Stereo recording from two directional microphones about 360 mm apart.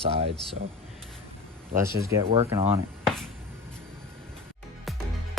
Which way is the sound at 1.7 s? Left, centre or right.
Centre.